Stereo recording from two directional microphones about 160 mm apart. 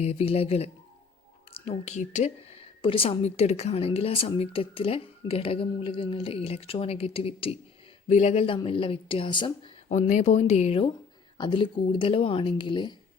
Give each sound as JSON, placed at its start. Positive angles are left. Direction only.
{"t": 0.0, "sound": "a woman's voice", "side_deg": 40}
{"t": 9.9, "sound": "a woman's voice", "side_deg": 45}